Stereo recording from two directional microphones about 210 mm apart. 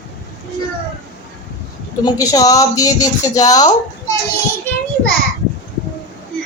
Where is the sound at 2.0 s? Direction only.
15° left (ahead or behind).